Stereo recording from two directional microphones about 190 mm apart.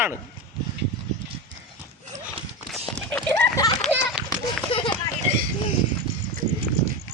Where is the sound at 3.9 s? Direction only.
5° right (ahead or behind).